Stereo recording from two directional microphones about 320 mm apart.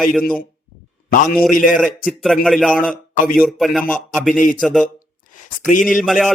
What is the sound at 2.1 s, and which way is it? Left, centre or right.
Speech, centre.